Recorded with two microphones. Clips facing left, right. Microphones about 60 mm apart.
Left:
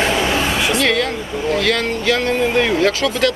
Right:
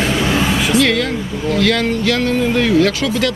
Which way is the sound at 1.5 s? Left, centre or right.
Centre.